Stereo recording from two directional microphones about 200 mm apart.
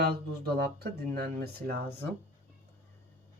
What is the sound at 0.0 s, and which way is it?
Speech, 50° right (ahead or behind).